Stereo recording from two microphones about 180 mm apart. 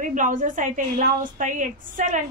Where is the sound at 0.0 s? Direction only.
45° right (ahead or behind).